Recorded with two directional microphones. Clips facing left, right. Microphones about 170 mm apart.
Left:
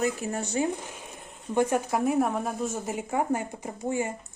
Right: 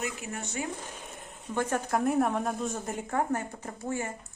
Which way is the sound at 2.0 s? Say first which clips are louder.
Even; centre (ahead or behind).